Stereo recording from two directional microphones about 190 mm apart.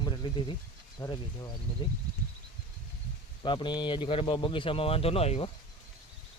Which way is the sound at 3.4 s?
25° left (ahead or behind).